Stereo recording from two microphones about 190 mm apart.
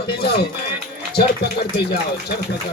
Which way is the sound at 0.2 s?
60° left (ahead or behind).